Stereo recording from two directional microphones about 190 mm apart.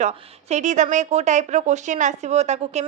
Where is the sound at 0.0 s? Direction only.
35° right (ahead or behind).